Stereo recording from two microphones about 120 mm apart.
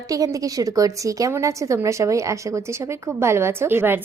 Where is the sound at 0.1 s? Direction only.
30° right (ahead or behind).